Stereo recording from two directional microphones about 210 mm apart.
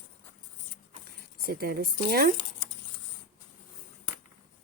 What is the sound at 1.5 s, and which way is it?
Speech, 45° right (ahead or behind).